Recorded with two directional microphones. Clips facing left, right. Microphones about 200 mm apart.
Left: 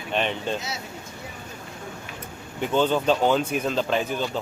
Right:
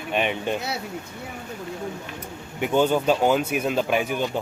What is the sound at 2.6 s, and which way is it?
Speech, 10° right (ahead or behind).